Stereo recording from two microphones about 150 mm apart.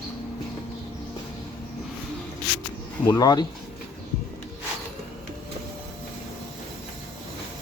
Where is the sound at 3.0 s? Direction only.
20° left (ahead or behind).